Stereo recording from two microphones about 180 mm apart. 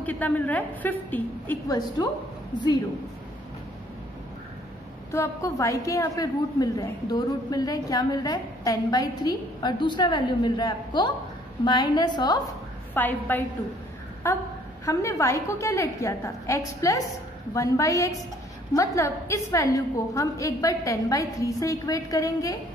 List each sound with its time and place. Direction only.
0.0 s a woman's voice: 10° left (ahead or behind)
1.7 s a woman's voice: 20° left (ahead or behind)
5.1 s a woman's voice: 15° left (ahead or behind)
12.9 s a woman's voice: 10° left (ahead or behind)